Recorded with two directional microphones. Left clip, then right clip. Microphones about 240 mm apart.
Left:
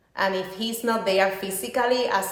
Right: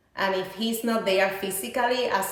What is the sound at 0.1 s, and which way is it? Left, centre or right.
A woman's voice, centre.